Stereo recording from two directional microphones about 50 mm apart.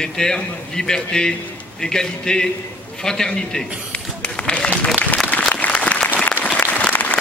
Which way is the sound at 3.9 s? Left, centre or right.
Left.